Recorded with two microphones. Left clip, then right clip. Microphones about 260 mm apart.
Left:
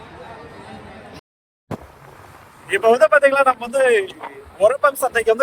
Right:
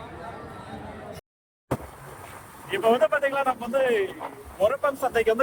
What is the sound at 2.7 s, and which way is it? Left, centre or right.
Speech, left.